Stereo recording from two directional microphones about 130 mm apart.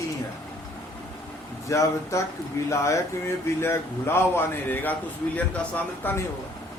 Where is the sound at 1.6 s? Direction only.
25° left (ahead or behind).